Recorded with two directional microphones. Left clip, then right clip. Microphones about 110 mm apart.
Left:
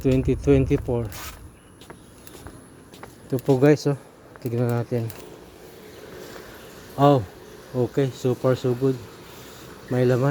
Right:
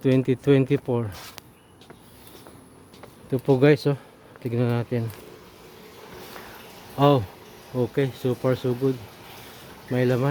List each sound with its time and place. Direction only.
0.0 s speech: 40° right (ahead or behind)
3.3 s speech: 40° right (ahead or behind)
6.9 s speech: 25° right (ahead or behind)
9.9 s speech: 15° right (ahead or behind)